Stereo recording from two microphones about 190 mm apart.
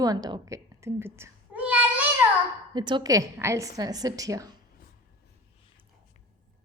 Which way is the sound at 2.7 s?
25° right (ahead or behind).